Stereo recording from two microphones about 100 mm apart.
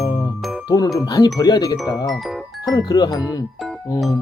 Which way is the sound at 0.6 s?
40° left (ahead or behind).